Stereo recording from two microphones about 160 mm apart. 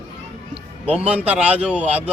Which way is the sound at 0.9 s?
10° right (ahead or behind).